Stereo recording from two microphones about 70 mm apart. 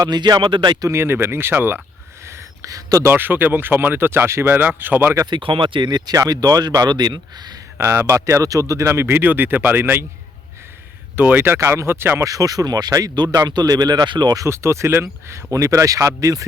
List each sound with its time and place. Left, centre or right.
0.0 s speech: right
0.9 s speech: right
2.2 s a sound: right
3.0 s speech: right
5.8 s speech: right
6.1 s speech: right
7.8 s speech: right
11.2 s speech: right
11.5 s speech: right
12.2 s speech: right
13.5 s speech: right
14.4 s speech: right